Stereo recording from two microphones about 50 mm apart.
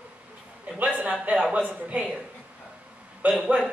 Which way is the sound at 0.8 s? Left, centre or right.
Right.